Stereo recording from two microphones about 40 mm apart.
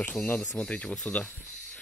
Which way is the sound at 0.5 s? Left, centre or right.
Left.